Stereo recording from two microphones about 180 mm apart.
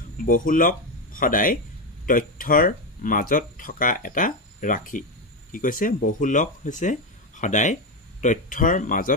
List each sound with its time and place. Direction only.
0.2 s speech: 50° left (ahead or behind)